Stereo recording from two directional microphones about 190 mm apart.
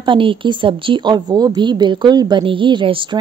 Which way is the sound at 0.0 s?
25° right (ahead or behind).